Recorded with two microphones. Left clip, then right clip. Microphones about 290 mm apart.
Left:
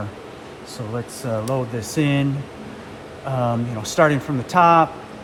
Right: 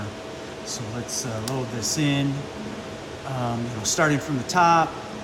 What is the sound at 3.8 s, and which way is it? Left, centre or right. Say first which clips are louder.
Speech: left 5 dB; left.